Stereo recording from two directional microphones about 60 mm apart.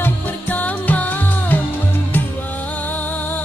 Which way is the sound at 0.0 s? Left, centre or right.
Left.